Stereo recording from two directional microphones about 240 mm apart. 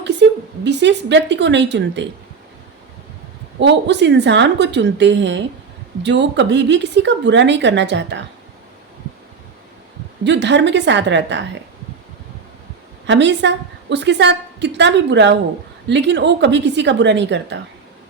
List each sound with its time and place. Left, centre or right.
0.0 s a woman's voice: right
3.6 s a woman's voice: right
10.2 s a woman's voice: right
13.1 s a woman's voice: right